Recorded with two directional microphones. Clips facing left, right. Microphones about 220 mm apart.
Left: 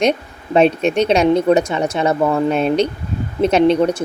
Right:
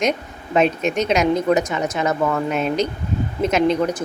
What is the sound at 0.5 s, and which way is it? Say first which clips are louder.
A woman's voice: left 4 dB; 30° left (ahead or behind).